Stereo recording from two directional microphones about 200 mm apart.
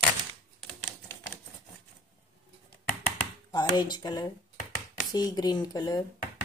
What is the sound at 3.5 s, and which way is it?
Speech, 20° left (ahead or behind).